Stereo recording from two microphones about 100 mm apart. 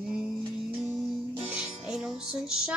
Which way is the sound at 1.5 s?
5° right (ahead or behind).